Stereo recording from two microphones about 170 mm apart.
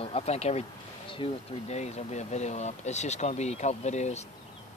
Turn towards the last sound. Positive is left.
turn(degrees=40)  # may be behind; listen again after turning